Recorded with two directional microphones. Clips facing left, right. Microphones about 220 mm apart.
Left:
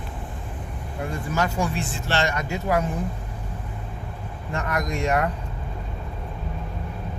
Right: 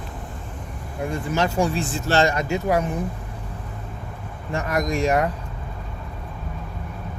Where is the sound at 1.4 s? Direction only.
30° right (ahead or behind).